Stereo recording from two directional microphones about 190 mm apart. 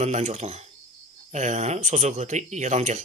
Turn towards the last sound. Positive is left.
turn(degrees=-40)  # may be behind; listen again after turning